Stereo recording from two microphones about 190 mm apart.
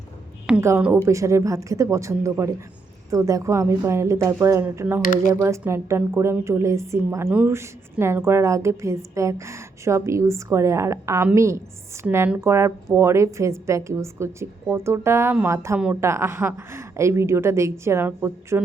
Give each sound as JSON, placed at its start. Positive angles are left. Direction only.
{"t": 0.4, "sound": "a woman's voice", "side_deg": -10}
{"t": 5.0, "sound": "speech", "side_deg": 45}
{"t": 5.3, "sound": "a woman's voice", "side_deg": -15}